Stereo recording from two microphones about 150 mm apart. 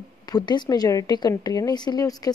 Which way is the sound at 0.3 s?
30° left (ahead or behind).